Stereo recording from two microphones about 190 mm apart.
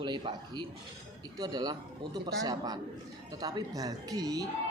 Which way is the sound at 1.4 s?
20° right (ahead or behind).